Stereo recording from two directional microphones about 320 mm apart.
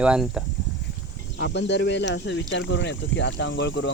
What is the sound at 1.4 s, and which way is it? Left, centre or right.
Speech, left.